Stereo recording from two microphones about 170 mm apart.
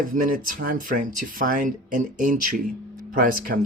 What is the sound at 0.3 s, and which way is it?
Speech, 55° right (ahead or behind).